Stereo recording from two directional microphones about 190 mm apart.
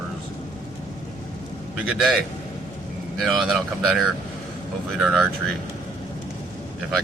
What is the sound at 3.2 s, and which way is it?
Speech, centre (ahead or behind).